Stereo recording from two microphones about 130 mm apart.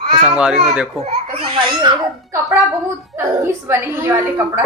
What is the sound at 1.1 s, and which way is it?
Baby laughter, 50° right (ahead or behind).